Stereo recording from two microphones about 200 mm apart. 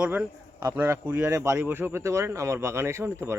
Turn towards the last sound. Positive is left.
turn(degrees=-15)  # may be behind; listen again after turning